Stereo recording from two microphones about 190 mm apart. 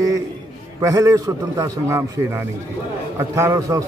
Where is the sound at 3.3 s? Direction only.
15° right (ahead or behind).